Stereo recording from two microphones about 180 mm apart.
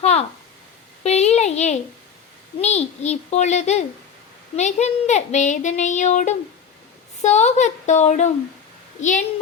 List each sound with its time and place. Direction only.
0.0 s a woman's voice: 35° left (ahead or behind)